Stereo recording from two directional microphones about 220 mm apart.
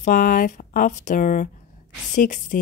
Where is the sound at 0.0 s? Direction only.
35° left (ahead or behind).